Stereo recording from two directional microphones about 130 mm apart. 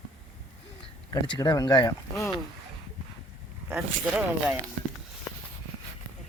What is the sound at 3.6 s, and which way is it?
Speech, 10° right (ahead or behind).